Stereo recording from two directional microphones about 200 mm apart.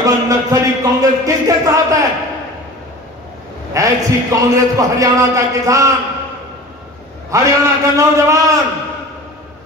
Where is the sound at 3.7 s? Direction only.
15° right (ahead or behind).